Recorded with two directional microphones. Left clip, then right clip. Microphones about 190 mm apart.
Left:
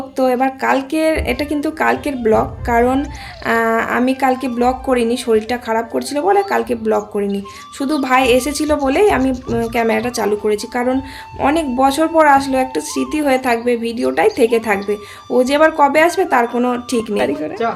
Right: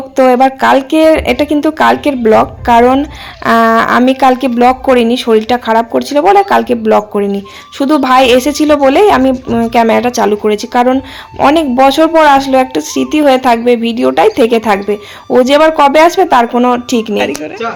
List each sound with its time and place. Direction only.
0.2 s speech: 30° right (ahead or behind)
17.2 s speech: 10° left (ahead or behind)